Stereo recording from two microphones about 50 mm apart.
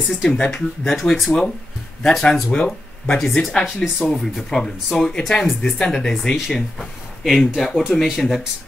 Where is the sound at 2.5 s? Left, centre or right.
Left.